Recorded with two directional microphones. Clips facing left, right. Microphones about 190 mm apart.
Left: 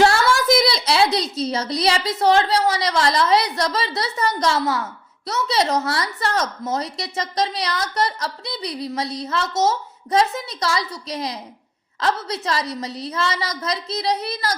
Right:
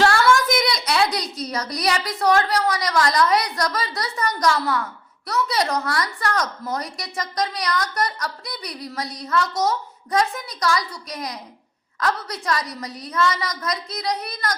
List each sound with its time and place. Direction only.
0.0 s a woman's voice: 30° left (ahead or behind)